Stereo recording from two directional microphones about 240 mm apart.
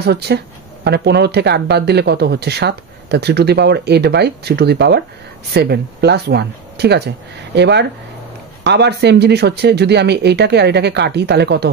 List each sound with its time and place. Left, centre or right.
0.0 s speech: right